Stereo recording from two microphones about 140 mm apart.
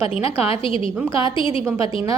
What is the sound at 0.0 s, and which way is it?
A woman's voice, 40° left (ahead or behind).